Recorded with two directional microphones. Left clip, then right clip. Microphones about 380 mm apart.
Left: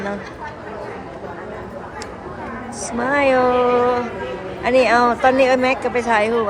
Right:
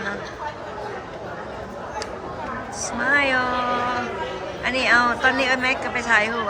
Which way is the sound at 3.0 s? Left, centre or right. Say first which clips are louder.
Left 4 dB; centre.